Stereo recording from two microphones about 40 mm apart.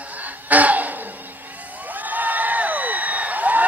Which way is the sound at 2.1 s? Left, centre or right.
Right.